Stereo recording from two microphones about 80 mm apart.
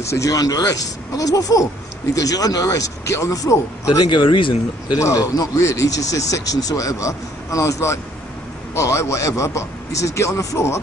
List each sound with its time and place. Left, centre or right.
0.1 s speech: left
3.9 s speech: left
4.9 s a man's voice: left